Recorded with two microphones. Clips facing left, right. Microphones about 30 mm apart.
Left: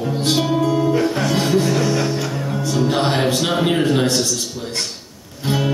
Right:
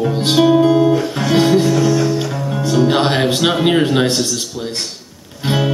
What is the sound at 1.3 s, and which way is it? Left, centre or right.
Speech, centre.